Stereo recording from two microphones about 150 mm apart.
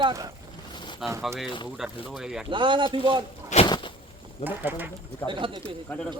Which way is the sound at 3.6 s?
30° left (ahead or behind).